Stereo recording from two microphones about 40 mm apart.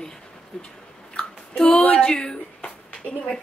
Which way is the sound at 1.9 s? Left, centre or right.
Centre.